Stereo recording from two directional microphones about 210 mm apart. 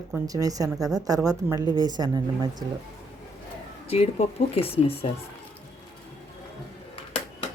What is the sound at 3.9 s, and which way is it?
Speech, 30° left (ahead or behind).